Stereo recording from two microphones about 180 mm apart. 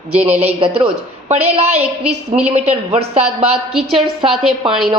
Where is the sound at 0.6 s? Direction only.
30° right (ahead or behind).